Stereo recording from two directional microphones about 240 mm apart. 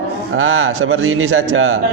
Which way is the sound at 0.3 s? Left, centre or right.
Right.